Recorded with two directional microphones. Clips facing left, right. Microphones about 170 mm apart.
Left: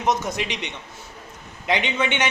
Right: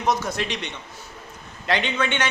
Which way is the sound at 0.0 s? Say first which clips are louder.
Even; 20° left (ahead or behind).